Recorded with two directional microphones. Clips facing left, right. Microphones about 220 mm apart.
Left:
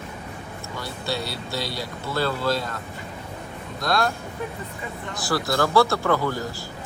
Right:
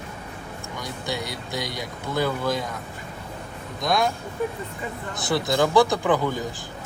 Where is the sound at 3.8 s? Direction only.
20° right (ahead or behind).